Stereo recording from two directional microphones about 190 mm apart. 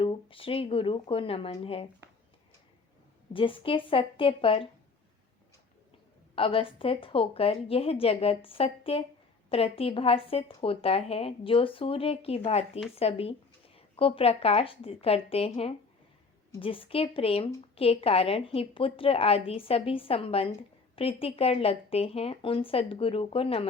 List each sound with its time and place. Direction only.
0.0 s a woman's voice: 30° left (ahead or behind)
3.3 s a woman's voice: 25° left (ahead or behind)
6.3 s a woman's voice: 30° left (ahead or behind)